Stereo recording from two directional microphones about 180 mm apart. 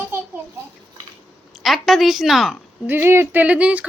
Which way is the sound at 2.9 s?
10° right (ahead or behind).